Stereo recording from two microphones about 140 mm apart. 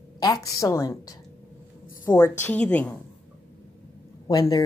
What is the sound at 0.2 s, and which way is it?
A woman's voice, 25° left (ahead or behind).